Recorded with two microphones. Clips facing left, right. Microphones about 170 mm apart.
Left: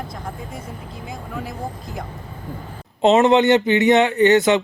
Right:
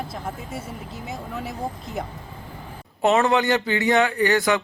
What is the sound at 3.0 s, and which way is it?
Speech, 20° left (ahead or behind).